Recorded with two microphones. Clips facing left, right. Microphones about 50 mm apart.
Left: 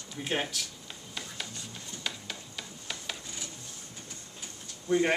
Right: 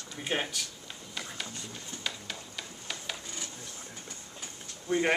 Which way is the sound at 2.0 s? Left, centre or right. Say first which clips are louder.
Even; centre.